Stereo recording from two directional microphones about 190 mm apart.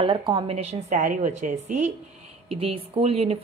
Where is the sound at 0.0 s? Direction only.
25° right (ahead or behind).